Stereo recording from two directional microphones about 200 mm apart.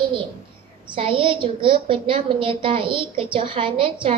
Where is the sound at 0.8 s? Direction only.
25° right (ahead or behind).